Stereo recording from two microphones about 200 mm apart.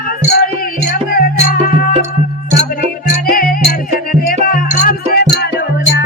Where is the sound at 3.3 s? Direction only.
45° left (ahead or behind).